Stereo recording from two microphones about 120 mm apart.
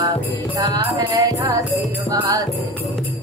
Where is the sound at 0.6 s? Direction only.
35° right (ahead or behind).